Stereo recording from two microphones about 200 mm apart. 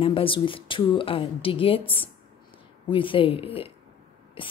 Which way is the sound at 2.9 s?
25° left (ahead or behind).